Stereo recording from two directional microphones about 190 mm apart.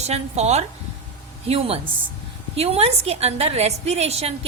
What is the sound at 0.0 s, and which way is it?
A woman's voice, 35° right (ahead or behind).